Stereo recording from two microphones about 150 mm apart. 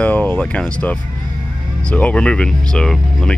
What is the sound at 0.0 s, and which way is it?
Speech, 10° left (ahead or behind).